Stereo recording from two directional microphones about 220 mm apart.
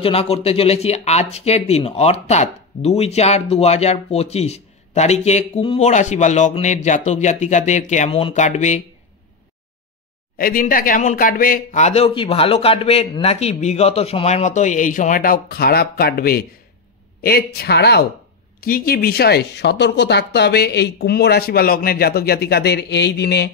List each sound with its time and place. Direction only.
0.0 s speech: 25° left (ahead or behind)
10.3 s speech: 40° left (ahead or behind)